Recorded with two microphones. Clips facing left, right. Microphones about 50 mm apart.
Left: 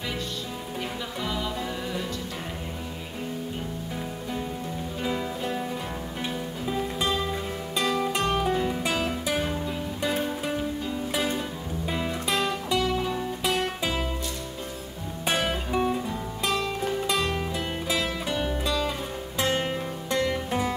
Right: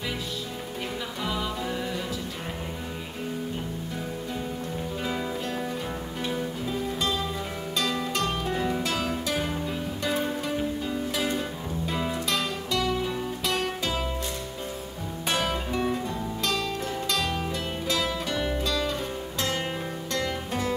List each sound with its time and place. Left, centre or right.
1.2 s music: centre
6.2 s music: centre
8.5 s music: centre
8.8 s music: centre
11.1 s music: centre
11.9 s music: centre
12.4 s music: centre
15.5 s music: centre